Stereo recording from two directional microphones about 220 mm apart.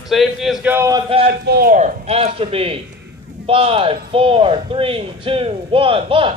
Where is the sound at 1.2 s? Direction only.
45° right (ahead or behind).